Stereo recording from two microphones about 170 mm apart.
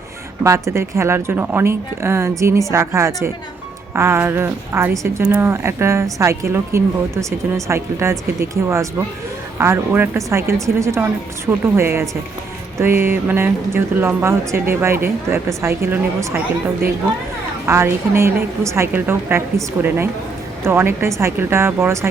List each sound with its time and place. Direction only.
0.4 s a woman's voice: 15° right (ahead or behind)
17.7 s a woman's voice: 15° right (ahead or behind)